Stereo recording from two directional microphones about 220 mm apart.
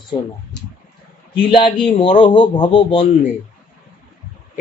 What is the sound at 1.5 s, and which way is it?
Speech, 20° left (ahead or behind).